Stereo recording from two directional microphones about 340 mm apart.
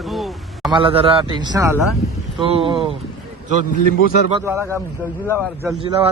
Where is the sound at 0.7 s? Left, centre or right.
Centre.